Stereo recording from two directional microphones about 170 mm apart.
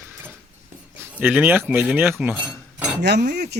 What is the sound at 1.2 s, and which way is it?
Speech, 10° right (ahead or behind).